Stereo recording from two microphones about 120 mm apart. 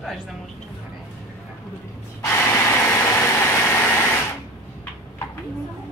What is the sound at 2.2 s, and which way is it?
Vehicle, 25° left (ahead or behind).